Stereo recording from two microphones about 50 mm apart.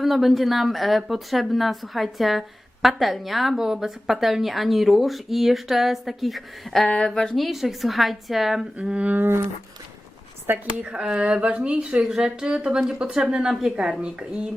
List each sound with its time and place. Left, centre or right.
0.0 s a woman's voice: centre
6.8 s speech: centre
7.1 s a woman's voice: centre
8.8 s speech: centre
9.2 s speech: right
10.8 s speech: centre